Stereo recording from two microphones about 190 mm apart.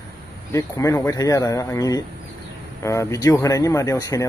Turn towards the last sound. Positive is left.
turn(degrees=15)  # may be behind; listen again after turning